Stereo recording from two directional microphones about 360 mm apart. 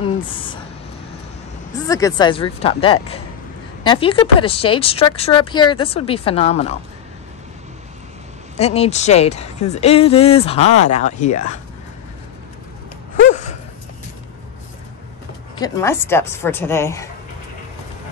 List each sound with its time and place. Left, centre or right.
0.0 s a sound: centre
1.9 s a woman's voice: centre
8.5 s a woman's voice: centre
13.3 s gasp: centre
15.6 s a woman's voice: centre